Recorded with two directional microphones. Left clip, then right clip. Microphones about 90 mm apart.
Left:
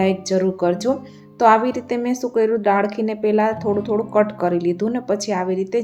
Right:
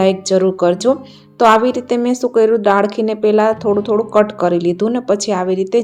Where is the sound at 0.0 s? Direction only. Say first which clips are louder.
Right 6 dB; 20° right (ahead or behind).